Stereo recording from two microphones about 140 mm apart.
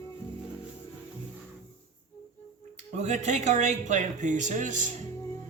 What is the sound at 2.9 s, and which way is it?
Speech, 55° right (ahead or behind).